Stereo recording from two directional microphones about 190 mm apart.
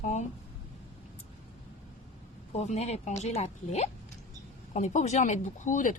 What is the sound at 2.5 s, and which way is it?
Speech, 35° left (ahead or behind).